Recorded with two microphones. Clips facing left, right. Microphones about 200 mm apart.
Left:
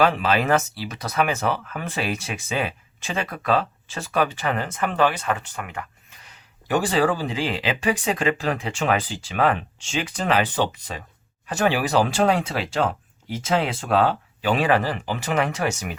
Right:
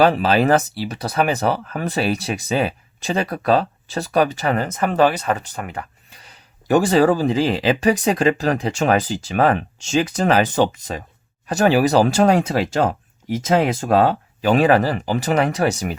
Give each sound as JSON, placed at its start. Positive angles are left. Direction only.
{"t": 0.0, "sound": "speech", "side_deg": -35}